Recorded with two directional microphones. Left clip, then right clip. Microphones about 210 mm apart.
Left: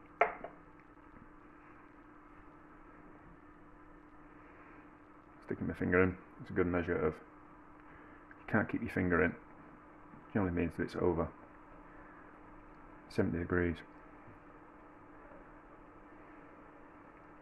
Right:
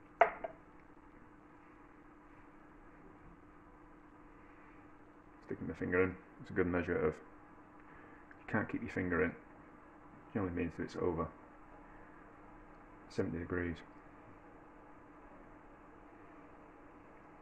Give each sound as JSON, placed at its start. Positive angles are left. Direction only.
{"t": 5.5, "sound": "speech", "side_deg": 30}
{"t": 6.4, "sound": "speech", "side_deg": 10}
{"t": 8.5, "sound": "speech", "side_deg": 20}
{"t": 10.3, "sound": "speech", "side_deg": 25}
{"t": 13.1, "sound": "speech", "side_deg": 25}